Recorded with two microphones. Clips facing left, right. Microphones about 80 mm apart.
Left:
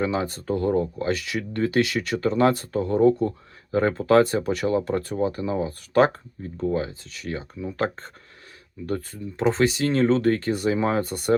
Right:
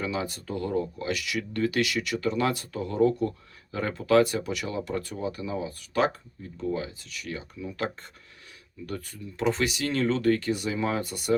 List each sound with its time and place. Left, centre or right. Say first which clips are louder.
0.0 s speech: left 6 dB; left